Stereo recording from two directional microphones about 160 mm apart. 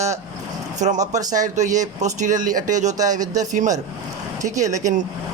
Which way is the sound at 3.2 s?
20° right (ahead or behind).